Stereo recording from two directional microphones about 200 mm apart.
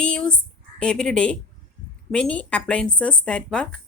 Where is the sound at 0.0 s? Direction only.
5° left (ahead or behind).